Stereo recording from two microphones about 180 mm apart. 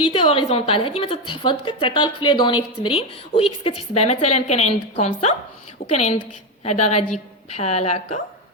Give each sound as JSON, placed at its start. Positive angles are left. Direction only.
{"t": 0.0, "sound": "a woman's voice", "side_deg": 30}